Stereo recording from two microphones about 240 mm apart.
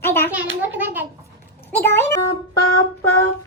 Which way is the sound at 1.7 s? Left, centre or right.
Centre.